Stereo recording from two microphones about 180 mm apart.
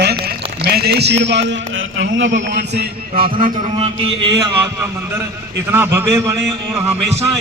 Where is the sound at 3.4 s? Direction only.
50° right (ahead or behind).